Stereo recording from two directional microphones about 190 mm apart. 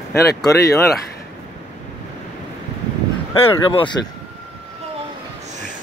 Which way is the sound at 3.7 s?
25° left (ahead or behind).